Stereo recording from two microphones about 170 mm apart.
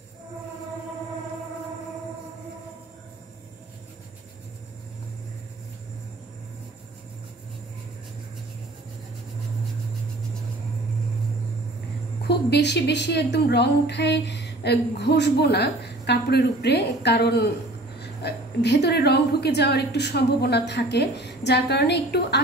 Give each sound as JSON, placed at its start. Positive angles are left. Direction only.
{"t": 12.2, "sound": "a woman's voice", "side_deg": 80}